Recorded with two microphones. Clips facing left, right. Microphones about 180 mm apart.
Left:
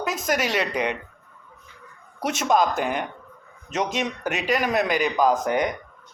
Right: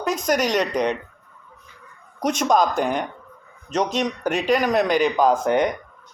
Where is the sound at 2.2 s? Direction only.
5° left (ahead or behind).